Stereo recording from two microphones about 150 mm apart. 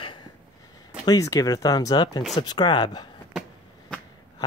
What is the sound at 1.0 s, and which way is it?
Speech, 25° left (ahead or behind).